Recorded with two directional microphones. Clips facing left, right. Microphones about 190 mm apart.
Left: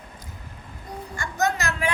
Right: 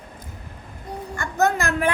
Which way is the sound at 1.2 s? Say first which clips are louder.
Right 4 dB; 55° right (ahead or behind).